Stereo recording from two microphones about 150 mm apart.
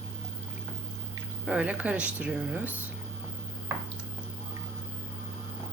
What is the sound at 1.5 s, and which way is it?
Speech, 10° right (ahead or behind).